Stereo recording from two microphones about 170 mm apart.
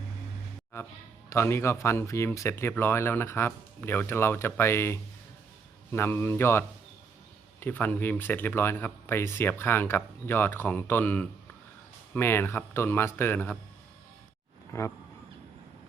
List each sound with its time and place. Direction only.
1.3 s speech: 15° left (ahead or behind)
14.7 s speech: 15° left (ahead or behind)